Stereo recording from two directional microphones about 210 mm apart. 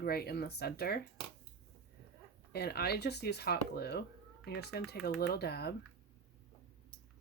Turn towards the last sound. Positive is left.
turn(degrees=50)  # may be behind; listen again after turning